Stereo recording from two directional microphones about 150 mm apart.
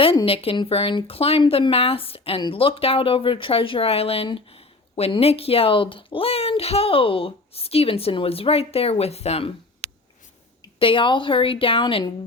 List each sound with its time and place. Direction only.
0.3 s speech: 35° left (ahead or behind)